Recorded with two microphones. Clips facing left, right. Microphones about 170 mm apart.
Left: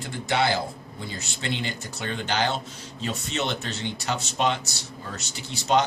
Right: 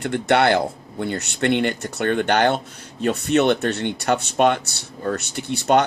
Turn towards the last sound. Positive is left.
turn(degrees=-60)  # may be behind; listen again after turning